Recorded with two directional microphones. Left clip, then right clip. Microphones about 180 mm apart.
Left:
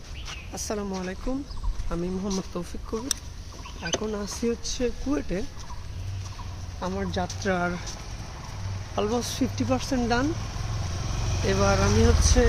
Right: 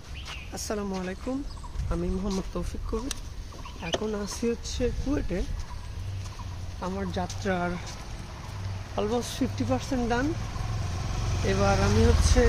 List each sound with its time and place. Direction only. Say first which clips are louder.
0.3 s speech: left 1 dB; 5° left (ahead or behind)
4.0 s speech: left 1 dB; centre (ahead or behind)
6.8 s speech: left 3 dB; 20° left (ahead or behind)
8.9 s speech: left 2 dB; 20° left (ahead or behind)
11.2 s speech: left 2 dB; 30° left (ahead or behind)